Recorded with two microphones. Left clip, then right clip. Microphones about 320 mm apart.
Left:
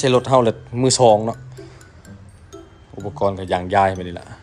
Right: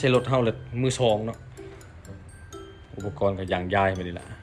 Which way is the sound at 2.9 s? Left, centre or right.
Centre.